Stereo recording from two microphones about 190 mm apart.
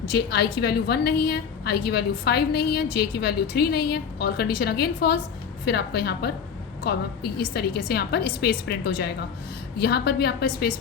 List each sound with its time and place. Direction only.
0.1 s a woman's voice: 55° left (ahead or behind)